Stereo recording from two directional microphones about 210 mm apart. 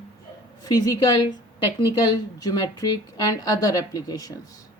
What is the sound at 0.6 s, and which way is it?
A woman's voice, 20° left (ahead or behind).